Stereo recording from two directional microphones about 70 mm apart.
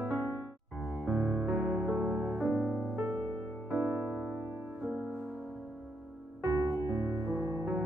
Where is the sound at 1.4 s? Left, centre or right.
Right.